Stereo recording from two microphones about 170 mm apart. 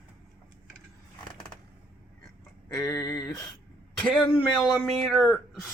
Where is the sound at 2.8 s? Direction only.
20° left (ahead or behind).